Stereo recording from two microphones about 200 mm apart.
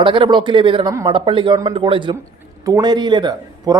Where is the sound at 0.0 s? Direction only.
25° right (ahead or behind).